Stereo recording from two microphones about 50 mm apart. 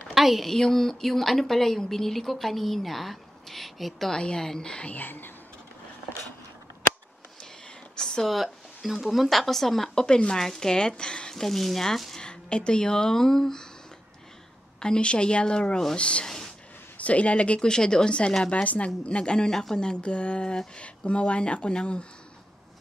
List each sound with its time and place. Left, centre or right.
0.1 s a sound: centre
0.5 s speech: centre
4.1 s speech: centre
4.9 s speech: left
7.9 s a sound: centre
8.3 s speech: centre
10.0 s speech: centre
12.3 s speech: centre
14.8 s speech: centre